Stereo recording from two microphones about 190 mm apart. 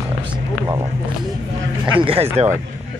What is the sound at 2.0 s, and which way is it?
Speech, 30° right (ahead or behind).